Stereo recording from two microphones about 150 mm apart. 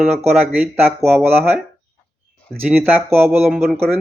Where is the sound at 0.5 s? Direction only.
Centre (ahead or behind).